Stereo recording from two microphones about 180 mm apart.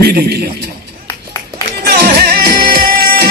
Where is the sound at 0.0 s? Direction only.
60° right (ahead or behind).